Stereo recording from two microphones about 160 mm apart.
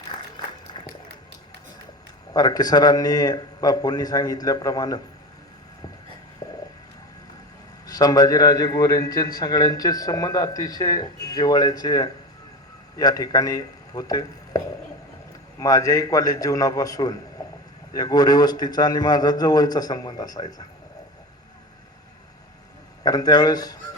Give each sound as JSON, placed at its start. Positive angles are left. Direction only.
{"t": 2.3, "sound": "a man's voice", "side_deg": 25}
{"t": 6.4, "sound": "stomach rumble", "side_deg": 20}
{"t": 7.9, "sound": "a man's voice", "side_deg": 20}
{"t": 23.0, "sound": "a man's voice", "side_deg": 25}